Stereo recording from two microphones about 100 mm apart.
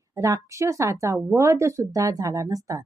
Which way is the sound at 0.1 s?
30° right (ahead or behind).